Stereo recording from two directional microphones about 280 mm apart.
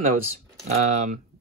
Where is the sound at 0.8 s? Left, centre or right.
Right.